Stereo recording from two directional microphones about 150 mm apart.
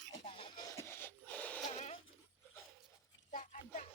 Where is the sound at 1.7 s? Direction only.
45° left (ahead or behind).